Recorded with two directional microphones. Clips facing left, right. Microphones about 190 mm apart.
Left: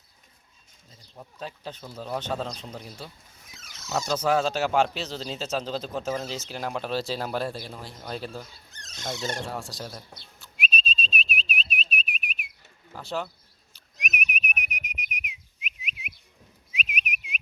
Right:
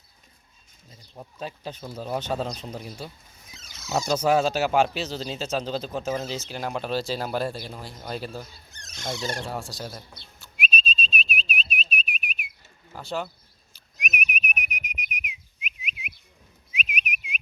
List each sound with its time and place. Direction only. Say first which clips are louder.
0.9 s speech: right 3 dB; 15° right (ahead or behind)
4.1 s speech: right 3 dB; 10° right (ahead or behind)
9.5 s speech: right 2 dB; centre (ahead or behind)
10.4 s whistling: right 2 dB; centre (ahead or behind)
12.9 s speech: right 1 dB; centre (ahead or behind)
13.9 s whistling: right 1 dB; centre (ahead or behind)